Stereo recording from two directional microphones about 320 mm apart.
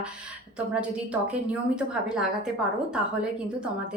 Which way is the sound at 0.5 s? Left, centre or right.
Centre.